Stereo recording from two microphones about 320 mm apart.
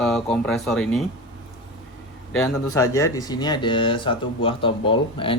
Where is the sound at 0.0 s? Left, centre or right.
Centre.